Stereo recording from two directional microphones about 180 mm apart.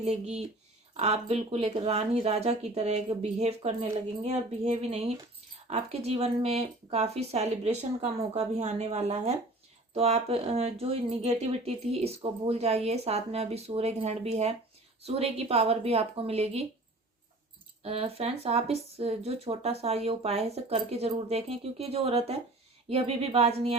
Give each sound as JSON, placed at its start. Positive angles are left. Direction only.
{"t": 0.0, "sound": "speech", "side_deg": -40}
{"t": 17.8, "sound": "speech", "side_deg": -35}